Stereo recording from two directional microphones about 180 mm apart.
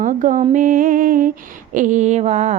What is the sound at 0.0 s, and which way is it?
Mantra, 45° right (ahead or behind).